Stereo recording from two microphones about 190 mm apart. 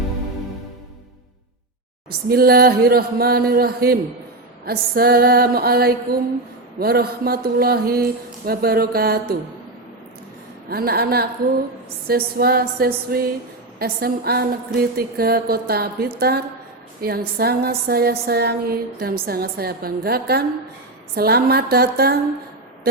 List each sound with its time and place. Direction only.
2.0 s speech: 55° right (ahead or behind)
10.7 s a woman's voice: 55° right (ahead or behind)